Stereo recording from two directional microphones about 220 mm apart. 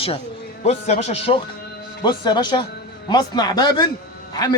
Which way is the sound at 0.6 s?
30° left (ahead or behind).